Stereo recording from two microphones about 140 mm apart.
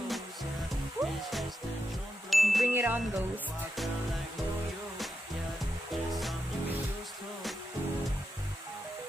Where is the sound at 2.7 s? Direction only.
15° right (ahead or behind).